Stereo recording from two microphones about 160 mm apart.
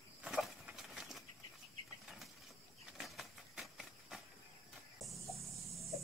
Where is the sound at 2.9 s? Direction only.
Centre (ahead or behind).